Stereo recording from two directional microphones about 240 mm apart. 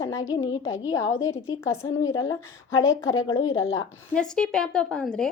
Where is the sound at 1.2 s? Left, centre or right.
Left.